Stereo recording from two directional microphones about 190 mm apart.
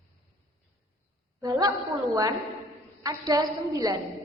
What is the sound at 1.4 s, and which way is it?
Speech, 20° right (ahead or behind).